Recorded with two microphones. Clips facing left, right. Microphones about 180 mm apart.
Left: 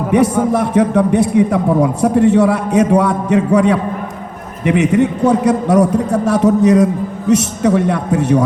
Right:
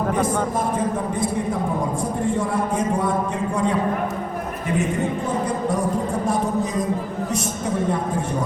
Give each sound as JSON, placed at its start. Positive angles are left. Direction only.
{"t": 0.1, "sound": "a man's voice", "side_deg": 75}